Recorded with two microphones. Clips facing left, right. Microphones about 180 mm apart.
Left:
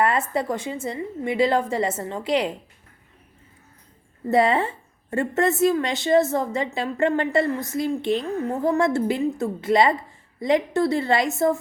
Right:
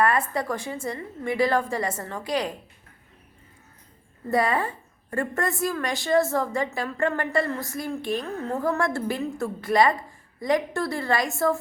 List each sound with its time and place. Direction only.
0.0 s a woman's voice: 20° left (ahead or behind)
4.3 s a woman's voice: 25° left (ahead or behind)